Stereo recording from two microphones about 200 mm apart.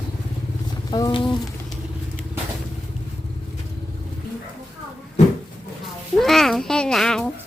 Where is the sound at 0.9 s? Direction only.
20° left (ahead or behind).